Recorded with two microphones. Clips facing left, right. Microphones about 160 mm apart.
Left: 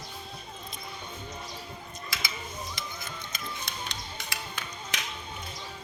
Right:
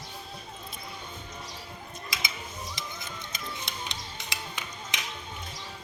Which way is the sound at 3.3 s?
20° right (ahead or behind).